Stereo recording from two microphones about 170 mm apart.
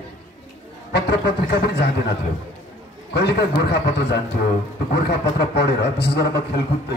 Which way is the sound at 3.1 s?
75° left (ahead or behind).